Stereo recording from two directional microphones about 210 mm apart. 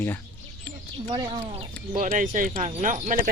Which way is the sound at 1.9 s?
35° right (ahead or behind).